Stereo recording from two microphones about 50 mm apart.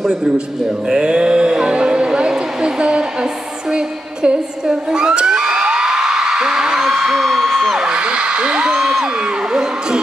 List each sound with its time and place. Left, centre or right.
0.8 s a sound: centre
3.7 s singing: centre
8.7 s music: centre